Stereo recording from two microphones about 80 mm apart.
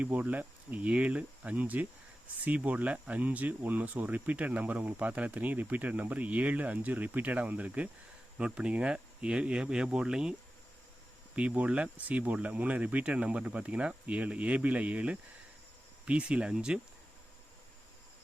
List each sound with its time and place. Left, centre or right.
0.0 s speech: centre
11.3 s speech: centre